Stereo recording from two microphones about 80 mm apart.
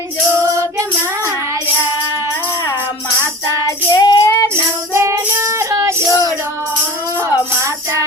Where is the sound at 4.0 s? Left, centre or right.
Left.